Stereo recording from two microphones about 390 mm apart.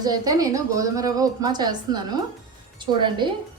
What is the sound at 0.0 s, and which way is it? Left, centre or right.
A woman's voice, centre.